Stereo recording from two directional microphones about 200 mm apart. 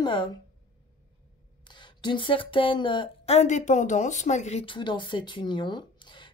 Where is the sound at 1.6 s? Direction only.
25° left (ahead or behind).